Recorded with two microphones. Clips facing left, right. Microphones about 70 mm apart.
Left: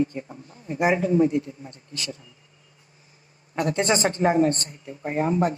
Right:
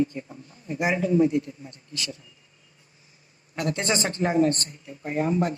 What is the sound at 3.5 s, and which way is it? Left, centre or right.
Speech, left.